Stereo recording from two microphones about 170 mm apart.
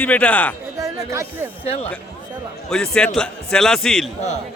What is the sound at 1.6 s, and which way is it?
Speech, 35° left (ahead or behind).